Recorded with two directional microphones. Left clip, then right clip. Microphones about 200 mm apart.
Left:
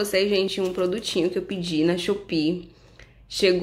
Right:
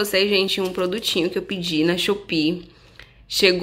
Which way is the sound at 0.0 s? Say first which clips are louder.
Right 3 dB; centre (ahead or behind).